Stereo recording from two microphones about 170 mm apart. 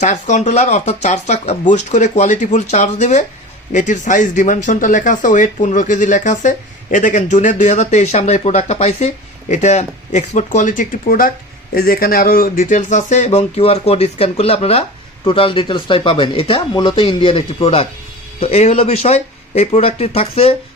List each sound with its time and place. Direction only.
0.0 s speech: 45° left (ahead or behind)